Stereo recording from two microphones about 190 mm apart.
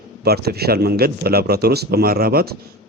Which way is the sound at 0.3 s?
55° right (ahead or behind).